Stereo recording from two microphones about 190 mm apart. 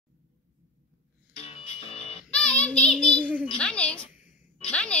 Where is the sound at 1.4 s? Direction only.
30° left (ahead or behind).